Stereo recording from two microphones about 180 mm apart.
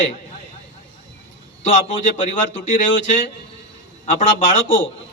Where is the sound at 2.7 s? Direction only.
45° left (ahead or behind).